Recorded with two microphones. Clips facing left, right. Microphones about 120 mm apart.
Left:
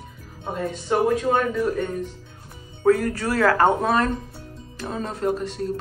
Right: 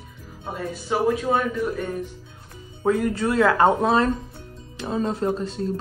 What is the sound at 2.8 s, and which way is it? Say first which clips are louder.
Speech: left 2 dB; 20° right (ahead or behind).